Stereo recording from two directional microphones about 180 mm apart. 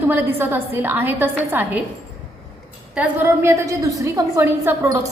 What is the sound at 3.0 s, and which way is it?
A woman's voice, 15° right (ahead or behind).